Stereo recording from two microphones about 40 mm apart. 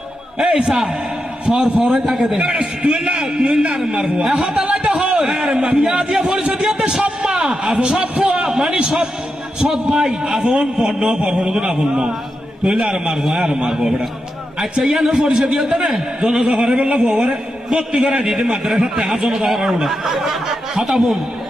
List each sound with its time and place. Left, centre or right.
0.7 s a man's voice: centre; by 2.0 s right
2.0 s a man's voice: centre
2.6 s a man's voice: right
8.0 s a man's voice: right
8.3 s a man's voice: centre